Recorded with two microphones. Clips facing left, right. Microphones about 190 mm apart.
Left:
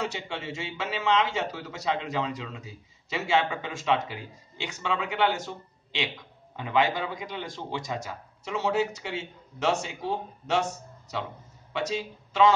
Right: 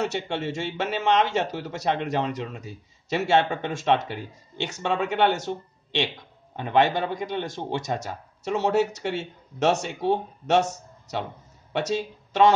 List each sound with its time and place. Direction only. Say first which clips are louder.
0.1 s a man's voice: right 7 dB; 70° right (ahead or behind)
11.7 s speech: right 4 dB; 60° right (ahead or behind)